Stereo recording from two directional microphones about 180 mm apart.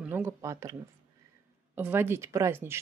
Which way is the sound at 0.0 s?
10° right (ahead or behind).